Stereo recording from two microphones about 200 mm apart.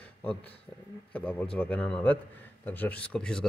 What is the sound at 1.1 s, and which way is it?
Speech, 5° left (ahead or behind).